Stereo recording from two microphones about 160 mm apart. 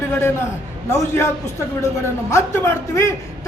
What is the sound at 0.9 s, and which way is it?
A man's voice, 15° left (ahead or behind).